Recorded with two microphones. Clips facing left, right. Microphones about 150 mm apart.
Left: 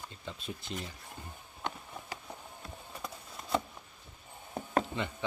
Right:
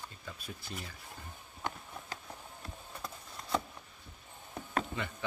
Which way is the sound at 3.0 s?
5° left (ahead or behind).